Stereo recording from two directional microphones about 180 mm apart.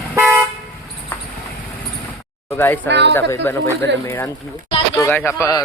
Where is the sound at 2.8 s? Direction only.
75° right (ahead or behind).